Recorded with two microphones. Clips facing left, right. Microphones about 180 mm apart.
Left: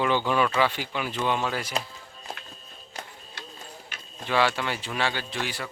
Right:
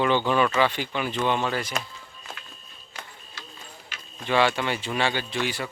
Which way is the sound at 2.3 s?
35° left (ahead or behind).